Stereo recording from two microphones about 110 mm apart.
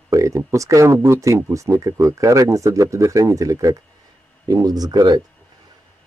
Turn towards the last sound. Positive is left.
turn(degrees=-40)  # may be behind; listen again after turning